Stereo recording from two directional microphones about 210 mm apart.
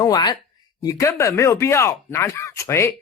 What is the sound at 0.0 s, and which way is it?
Speech, 20° left (ahead or behind).